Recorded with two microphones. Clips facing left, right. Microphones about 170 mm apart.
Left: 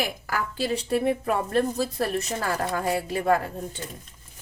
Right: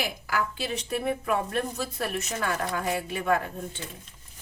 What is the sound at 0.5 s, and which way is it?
Speech, 35° left (ahead or behind).